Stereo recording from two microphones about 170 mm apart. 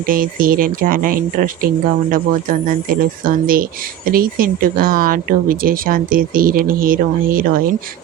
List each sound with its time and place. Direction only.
0.0 s speech: 55° right (ahead or behind)